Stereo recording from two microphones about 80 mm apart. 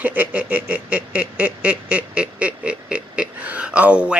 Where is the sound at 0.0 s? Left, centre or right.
Centre.